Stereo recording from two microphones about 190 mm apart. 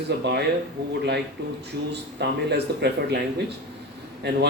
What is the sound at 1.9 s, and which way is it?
Speech, 60° right (ahead or behind).